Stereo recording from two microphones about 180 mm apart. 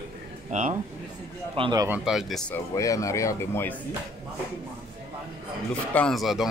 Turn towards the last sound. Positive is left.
turn(degrees=0)  # may be behind; listen again after turning